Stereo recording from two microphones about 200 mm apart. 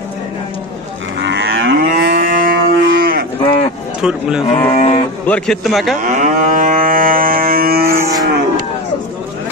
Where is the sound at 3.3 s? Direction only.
25° left (ahead or behind).